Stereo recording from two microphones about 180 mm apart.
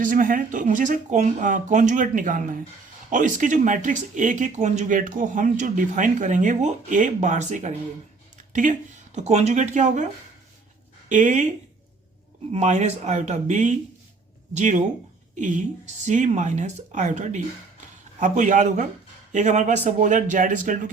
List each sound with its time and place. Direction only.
0.0 s speech: 50° right (ahead or behind)
9.1 s speech: 40° right (ahead or behind)
11.1 s speech: 45° right (ahead or behind)